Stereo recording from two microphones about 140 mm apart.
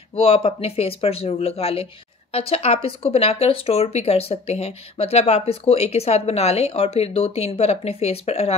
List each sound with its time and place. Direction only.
0.1 s speech: 40° left (ahead or behind)